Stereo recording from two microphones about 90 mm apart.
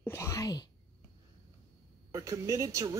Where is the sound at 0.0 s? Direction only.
30° left (ahead or behind).